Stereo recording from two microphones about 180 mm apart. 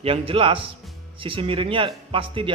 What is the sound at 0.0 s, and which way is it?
A man's voice, 30° right (ahead or behind).